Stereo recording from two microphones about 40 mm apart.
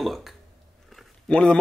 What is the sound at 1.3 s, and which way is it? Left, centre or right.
Speech, left.